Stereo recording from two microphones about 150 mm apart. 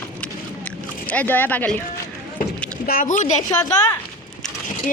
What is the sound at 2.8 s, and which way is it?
Speech, 65° left (ahead or behind).